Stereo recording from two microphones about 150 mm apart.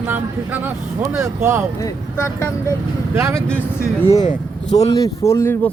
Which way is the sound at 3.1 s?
15° right (ahead or behind).